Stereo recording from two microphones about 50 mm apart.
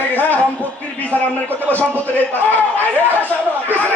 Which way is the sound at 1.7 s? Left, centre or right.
Left.